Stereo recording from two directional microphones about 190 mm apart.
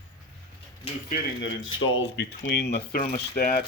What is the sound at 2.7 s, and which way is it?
Speech, 35° left (ahead or behind).